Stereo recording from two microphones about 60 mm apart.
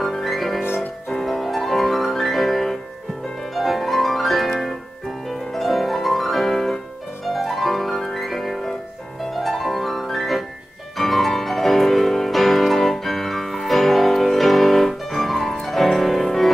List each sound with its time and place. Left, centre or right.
0.0 s music: centre